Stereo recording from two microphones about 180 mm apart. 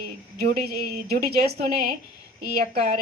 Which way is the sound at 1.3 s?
60° right (ahead or behind).